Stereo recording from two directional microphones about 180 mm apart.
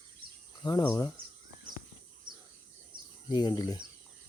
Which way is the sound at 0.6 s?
15° left (ahead or behind).